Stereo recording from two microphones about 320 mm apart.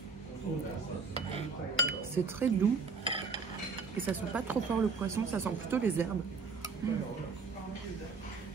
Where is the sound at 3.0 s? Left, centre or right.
Centre.